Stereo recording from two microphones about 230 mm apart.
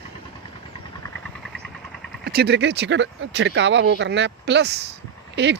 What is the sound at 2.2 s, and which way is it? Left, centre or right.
Speech, right.